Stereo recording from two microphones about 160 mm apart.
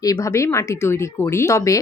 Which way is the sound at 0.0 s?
20° left (ahead or behind).